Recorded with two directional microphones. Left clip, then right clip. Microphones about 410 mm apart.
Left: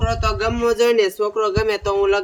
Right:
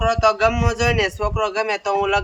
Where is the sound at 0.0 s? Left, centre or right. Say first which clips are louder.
Right 5 dB; centre.